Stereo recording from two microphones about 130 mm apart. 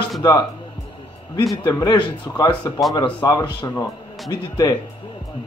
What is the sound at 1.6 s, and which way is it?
A man's voice, 30° left (ahead or behind).